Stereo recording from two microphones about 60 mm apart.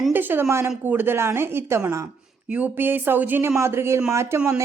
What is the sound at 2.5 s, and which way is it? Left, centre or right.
Speech, right.